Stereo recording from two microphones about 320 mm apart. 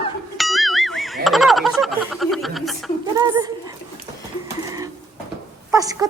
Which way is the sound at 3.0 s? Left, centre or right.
Centre.